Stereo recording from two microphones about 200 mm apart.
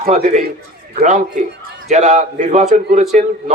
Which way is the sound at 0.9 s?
40° right (ahead or behind).